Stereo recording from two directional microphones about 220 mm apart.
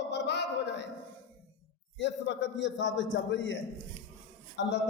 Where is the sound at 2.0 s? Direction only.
55° left (ahead or behind).